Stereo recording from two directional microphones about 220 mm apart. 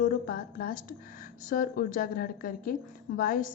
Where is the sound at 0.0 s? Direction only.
40° left (ahead or behind).